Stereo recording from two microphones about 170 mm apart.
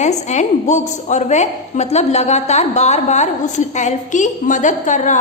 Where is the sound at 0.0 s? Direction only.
45° left (ahead or behind).